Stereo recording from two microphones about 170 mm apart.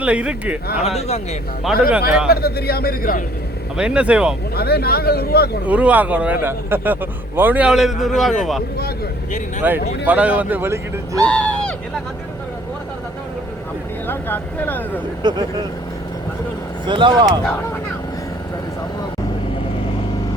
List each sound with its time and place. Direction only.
0.0 s speech: 5° right (ahead or behind)
0.9 s speech: 40° left (ahead or behind)
1.9 s speech: 5° right (ahead or behind)
2.3 s speech: 65° left (ahead or behind)
3.8 s speech: 5° right (ahead or behind)
4.5 s speech: 65° left (ahead or behind)
5.6 s speech: 10° right (ahead or behind)
9.6 s speech: 10° right (ahead or behind)
11.3 s a sound: 5° left (ahead or behind)
14.1 s speech: 10° left (ahead or behind)
15.2 s speech: 25° right (ahead or behind)
16.8 s speech: 30° right (ahead or behind)